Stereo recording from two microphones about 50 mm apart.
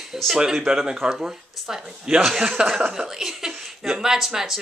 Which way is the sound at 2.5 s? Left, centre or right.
Centre.